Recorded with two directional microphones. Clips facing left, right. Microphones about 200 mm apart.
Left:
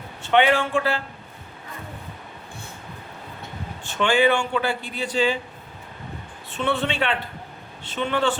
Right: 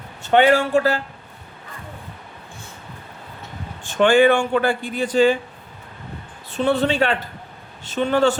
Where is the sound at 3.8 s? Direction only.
50° right (ahead or behind).